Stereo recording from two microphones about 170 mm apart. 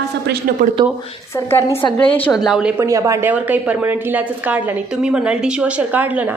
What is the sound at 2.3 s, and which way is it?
Speech, centre (ahead or behind).